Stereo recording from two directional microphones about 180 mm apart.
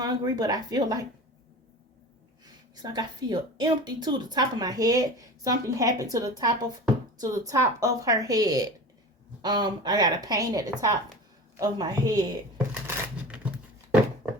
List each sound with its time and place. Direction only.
0.0 s a woman's voice: 20° right (ahead or behind)
2.7 s a woman's voice: 25° right (ahead or behind)
12.9 s coin: 5° right (ahead or behind)